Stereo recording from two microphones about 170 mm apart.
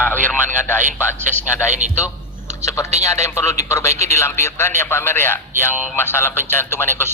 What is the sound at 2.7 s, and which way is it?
A man's voice, 15° left (ahead or behind).